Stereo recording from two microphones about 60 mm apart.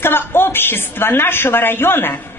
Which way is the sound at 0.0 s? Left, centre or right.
Left.